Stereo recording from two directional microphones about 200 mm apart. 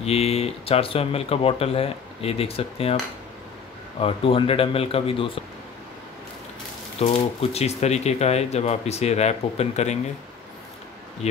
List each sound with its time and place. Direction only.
0.0 s speech: 30° left (ahead or behind)
4.0 s speech: 25° left (ahead or behind)
7.0 s speech: 30° left (ahead or behind)